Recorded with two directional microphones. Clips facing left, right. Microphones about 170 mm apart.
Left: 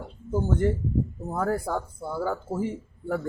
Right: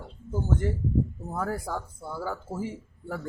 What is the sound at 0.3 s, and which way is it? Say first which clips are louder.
Speech: left 4 dB; 60° left (ahead or behind).